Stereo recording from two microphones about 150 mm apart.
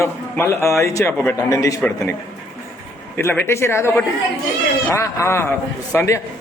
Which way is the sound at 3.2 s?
15° left (ahead or behind).